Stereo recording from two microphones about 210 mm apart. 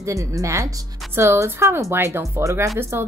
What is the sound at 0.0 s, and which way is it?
A woman's voice, 15° right (ahead or behind).